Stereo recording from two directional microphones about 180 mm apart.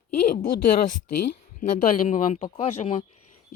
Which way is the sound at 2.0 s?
40° left (ahead or behind).